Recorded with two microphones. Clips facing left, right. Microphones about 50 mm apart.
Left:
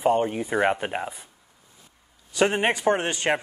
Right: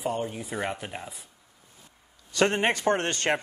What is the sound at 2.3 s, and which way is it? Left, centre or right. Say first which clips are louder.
Speech: left 2 dB; centre.